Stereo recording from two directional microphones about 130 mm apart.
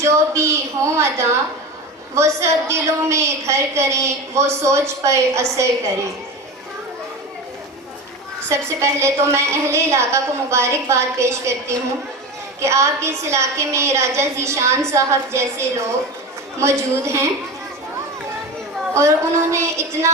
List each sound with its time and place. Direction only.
0.0 s a woman's voice: 20° right (ahead or behind)
8.4 s a woman's voice: 20° right (ahead or behind)
18.9 s a woman's voice: 20° right (ahead or behind)